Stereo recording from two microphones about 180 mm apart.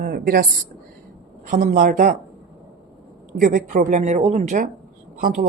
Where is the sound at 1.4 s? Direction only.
45° right (ahead or behind).